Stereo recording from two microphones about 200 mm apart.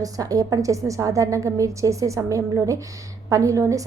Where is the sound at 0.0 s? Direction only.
20° right (ahead or behind).